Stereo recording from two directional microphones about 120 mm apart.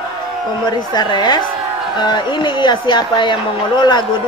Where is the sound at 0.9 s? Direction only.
40° left (ahead or behind).